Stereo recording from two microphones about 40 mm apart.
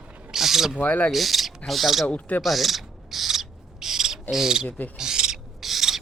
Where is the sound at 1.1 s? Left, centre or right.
Centre.